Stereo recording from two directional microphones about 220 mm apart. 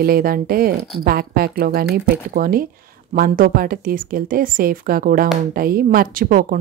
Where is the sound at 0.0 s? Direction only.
40° right (ahead or behind).